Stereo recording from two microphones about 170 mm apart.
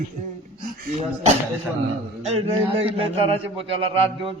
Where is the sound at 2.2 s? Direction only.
35° right (ahead or behind).